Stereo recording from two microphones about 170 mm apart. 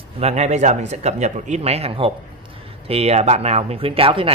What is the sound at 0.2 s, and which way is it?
Speech, 40° right (ahead or behind).